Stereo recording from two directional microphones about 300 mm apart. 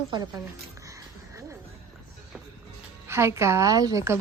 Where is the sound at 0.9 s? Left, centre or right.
Centre.